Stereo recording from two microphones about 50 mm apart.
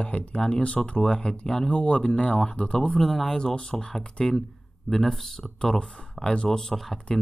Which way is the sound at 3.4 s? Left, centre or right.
Centre.